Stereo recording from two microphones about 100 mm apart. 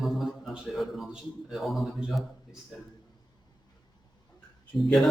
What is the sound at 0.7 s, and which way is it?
A man's voice, centre (ahead or behind).